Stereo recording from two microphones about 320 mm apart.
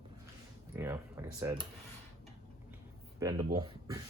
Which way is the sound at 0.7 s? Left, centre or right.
Centre.